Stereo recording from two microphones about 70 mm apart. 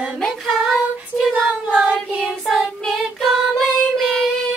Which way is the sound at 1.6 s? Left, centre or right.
Centre.